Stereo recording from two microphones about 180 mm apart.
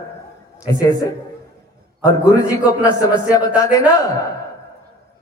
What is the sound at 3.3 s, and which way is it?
Speech, 20° left (ahead or behind).